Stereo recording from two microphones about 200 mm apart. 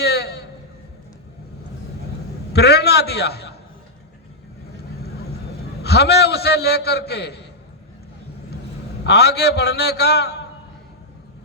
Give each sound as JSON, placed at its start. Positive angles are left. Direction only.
{"t": 0.0, "sound": "a sound", "side_deg": 55}
{"t": 2.5, "sound": "a man's voice", "side_deg": 55}
{"t": 5.8, "sound": "a man's voice", "side_deg": 55}
{"t": 9.0, "sound": "a man's voice", "side_deg": 55}